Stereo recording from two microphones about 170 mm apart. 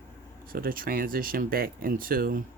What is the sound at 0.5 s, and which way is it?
Speech, 60° right (ahead or behind).